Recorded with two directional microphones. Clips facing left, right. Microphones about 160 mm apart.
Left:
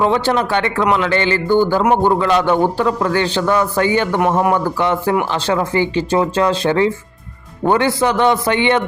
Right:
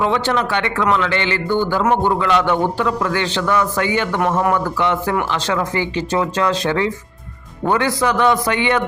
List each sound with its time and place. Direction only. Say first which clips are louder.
0.0 s a man's voice: left 3 dB; 35° left (ahead or behind)